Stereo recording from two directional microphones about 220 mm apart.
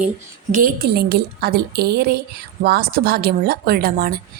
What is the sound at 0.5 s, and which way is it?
A woman's voice, 40° right (ahead or behind).